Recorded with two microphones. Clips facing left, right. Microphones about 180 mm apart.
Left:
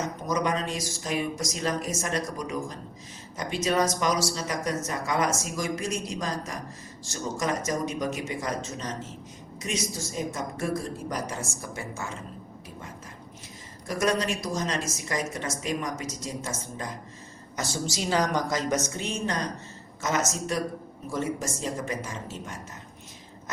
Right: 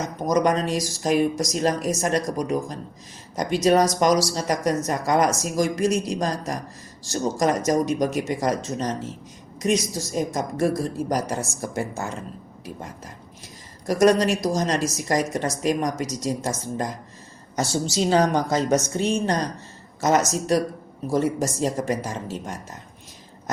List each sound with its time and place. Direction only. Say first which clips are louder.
0.3 s a woman's voice: right 8 dB; 45° right (ahead or behind)
13.8 s a woman's voice: right 8 dB; 40° right (ahead or behind)
17.6 s a woman's voice: right 8 dB; 30° right (ahead or behind)